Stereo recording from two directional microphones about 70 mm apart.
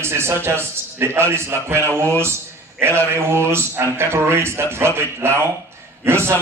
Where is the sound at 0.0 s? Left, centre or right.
Right.